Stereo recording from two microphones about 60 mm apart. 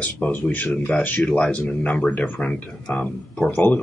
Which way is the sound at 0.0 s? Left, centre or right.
Left.